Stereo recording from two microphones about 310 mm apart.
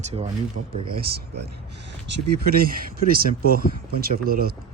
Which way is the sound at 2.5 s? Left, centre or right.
Right.